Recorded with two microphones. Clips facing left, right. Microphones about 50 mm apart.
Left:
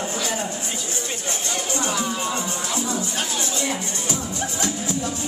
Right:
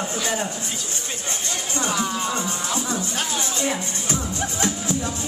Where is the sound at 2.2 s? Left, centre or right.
Left.